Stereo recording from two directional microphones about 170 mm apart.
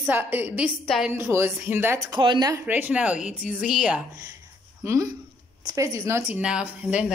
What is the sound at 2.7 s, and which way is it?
Speech, 10° right (ahead or behind).